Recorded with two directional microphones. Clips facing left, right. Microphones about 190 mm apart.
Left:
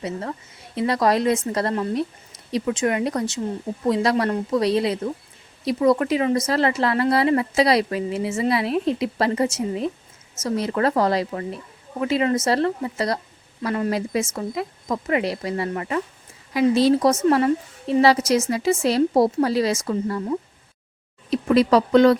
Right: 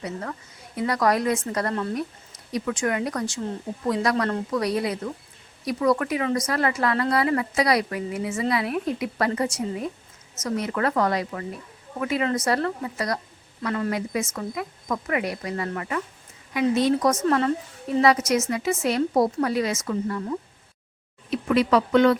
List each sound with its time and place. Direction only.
0.0 s a woman's voice: 25° left (ahead or behind)